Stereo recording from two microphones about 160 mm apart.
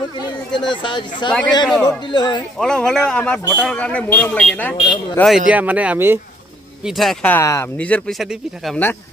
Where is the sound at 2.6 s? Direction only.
5° left (ahead or behind).